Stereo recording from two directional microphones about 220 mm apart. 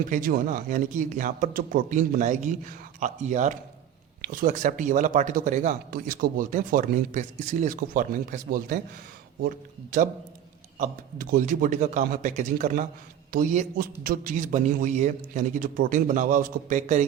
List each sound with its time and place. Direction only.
0.1 s speech: 40° right (ahead or behind)